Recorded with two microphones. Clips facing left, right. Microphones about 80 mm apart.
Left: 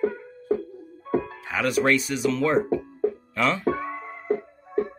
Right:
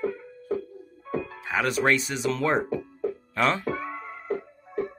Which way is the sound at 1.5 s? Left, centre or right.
Right.